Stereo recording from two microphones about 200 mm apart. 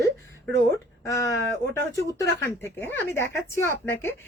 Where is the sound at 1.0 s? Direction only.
15° left (ahead or behind).